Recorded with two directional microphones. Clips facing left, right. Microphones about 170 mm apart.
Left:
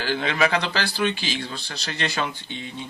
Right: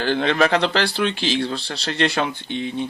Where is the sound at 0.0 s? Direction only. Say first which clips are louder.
Right 4 dB; 55° right (ahead or behind).